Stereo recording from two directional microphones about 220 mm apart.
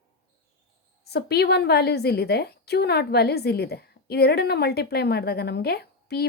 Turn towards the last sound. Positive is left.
turn(degrees=45)  # may be behind; listen again after turning